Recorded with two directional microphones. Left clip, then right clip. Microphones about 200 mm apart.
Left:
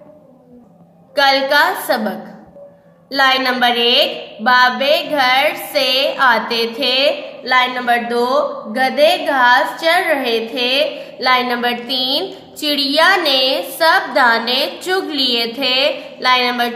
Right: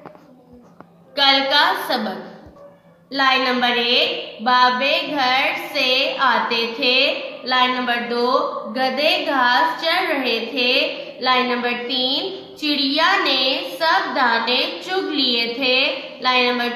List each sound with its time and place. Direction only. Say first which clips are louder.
1.1 s a woman's voice: left 3 dB; 55° left (ahead or behind)
3.1 s a woman's voice: left 3 dB; 50° left (ahead or behind)